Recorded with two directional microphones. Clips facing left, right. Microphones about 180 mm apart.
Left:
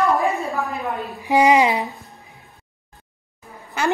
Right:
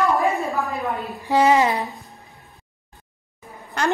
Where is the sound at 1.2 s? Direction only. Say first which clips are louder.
Left 2 dB; 15° left (ahead or behind).